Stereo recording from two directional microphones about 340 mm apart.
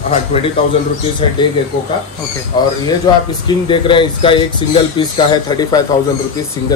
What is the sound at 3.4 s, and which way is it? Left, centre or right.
A man's voice, centre.